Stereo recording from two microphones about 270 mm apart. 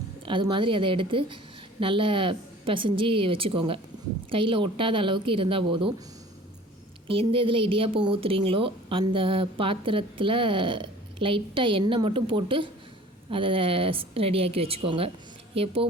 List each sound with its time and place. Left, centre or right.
0.3 s a woman's voice: centre
7.1 s a woman's voice: centre